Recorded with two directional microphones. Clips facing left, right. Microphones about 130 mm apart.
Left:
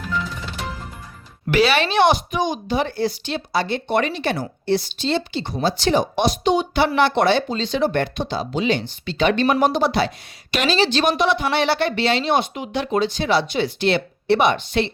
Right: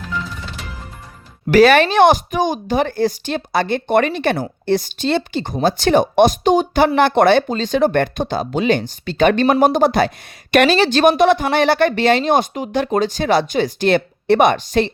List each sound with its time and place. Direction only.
1.5 s speech: 45° right (ahead or behind)